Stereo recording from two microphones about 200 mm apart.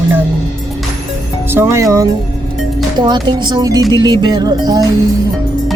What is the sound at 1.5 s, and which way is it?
Speech, 15° right (ahead or behind).